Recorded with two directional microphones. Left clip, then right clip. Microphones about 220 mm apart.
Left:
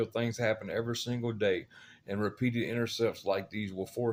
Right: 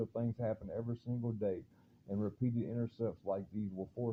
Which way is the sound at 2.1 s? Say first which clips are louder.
Left 7 dB; 25° left (ahead or behind).